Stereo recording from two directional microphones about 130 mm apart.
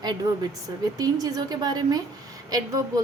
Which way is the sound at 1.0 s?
30° right (ahead or behind).